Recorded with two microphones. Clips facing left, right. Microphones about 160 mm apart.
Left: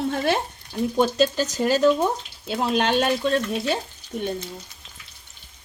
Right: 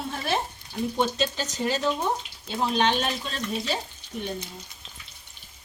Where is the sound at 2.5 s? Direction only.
60° left (ahead or behind).